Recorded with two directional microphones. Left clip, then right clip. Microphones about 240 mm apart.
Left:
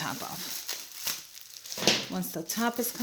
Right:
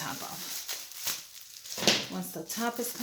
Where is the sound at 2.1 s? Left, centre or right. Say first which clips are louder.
Left 3 dB; left.